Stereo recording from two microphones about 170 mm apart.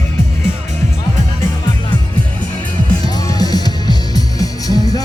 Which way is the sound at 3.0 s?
20° left (ahead or behind).